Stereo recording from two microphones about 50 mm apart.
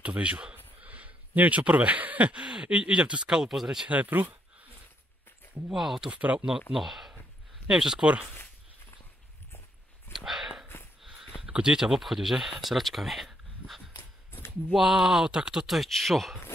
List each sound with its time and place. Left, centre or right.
0.0 s speech: right
3.9 s speech: right
5.7 s speech: centre
6.0 s speech: right
6.7 s speech: centre
10.1 s a sound: centre
11.4 s speech: centre